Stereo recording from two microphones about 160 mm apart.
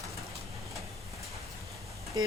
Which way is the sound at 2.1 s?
30° right (ahead or behind).